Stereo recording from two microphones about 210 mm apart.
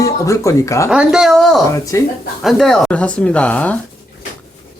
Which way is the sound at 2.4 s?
Centre (ahead or behind).